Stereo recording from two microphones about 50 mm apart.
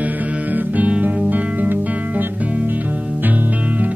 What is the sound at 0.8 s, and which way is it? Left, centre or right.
Music, right.